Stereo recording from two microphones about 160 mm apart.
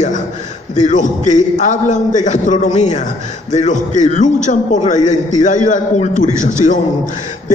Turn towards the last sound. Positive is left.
turn(degrees=50)  # may be behind; listen again after turning